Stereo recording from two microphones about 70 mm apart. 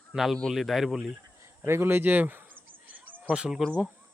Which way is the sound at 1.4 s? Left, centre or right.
Right.